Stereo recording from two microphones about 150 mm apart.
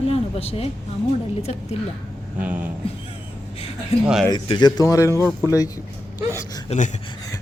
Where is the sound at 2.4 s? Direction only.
10° right (ahead or behind).